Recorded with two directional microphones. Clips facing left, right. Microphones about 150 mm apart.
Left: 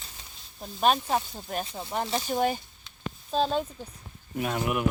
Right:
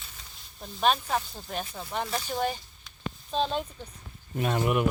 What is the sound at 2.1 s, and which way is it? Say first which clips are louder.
Speech: left 5 dB; 15° left (ahead or behind).